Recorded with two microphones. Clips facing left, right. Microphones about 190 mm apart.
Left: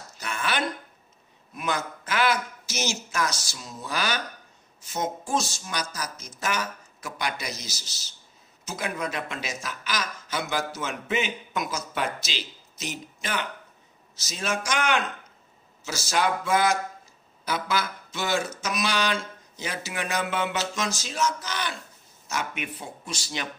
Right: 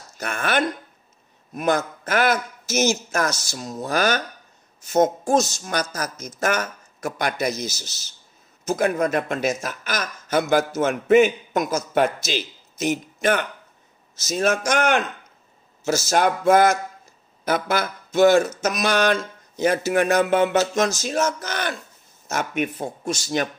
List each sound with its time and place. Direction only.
0.2 s speech: 50° right (ahead or behind)